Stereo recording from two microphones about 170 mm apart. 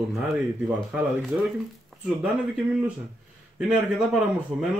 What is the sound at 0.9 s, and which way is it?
Speech, centre (ahead or behind).